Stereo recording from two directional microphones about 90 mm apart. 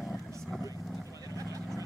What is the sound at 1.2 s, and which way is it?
Vehicle, 40° right (ahead or behind).